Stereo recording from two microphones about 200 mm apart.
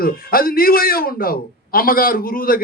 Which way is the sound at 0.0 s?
45° left (ahead or behind).